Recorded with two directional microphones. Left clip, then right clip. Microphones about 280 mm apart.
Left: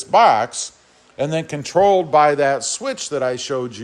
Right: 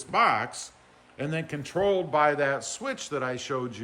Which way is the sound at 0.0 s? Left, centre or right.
Centre.